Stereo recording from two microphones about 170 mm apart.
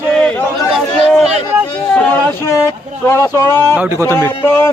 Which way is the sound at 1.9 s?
10° left (ahead or behind).